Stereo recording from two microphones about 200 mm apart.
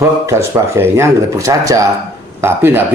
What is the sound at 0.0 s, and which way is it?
Speech, 15° right (ahead or behind).